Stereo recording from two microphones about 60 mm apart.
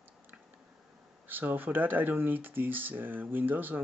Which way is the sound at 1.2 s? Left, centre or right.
Right.